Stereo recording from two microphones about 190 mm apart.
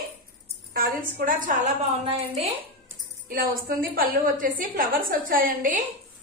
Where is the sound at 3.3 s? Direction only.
50° right (ahead or behind).